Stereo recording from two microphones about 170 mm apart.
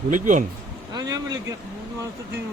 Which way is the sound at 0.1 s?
50° right (ahead or behind).